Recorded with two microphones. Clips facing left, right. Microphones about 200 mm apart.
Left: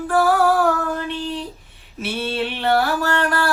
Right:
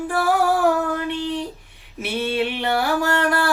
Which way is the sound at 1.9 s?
15° right (ahead or behind).